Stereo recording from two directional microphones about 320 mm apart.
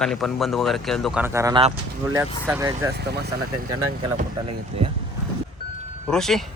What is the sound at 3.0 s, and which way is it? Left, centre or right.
Speech, right.